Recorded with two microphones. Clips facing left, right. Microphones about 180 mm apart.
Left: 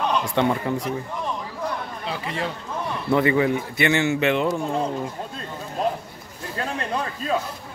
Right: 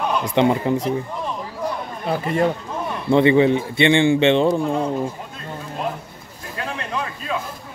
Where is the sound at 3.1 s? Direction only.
25° right (ahead or behind).